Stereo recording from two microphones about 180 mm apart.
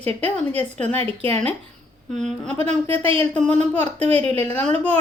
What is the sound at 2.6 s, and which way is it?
Speech, 35° right (ahead or behind).